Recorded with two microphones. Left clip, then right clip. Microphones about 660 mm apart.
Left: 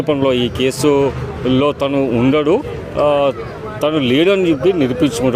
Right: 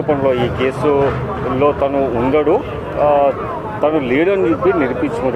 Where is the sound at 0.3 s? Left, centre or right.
Left.